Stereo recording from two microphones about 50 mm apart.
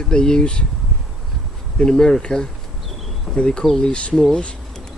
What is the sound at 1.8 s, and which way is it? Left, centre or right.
Speech, centre.